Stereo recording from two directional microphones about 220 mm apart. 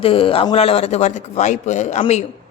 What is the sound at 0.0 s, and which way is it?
A man's voice, 25° left (ahead or behind).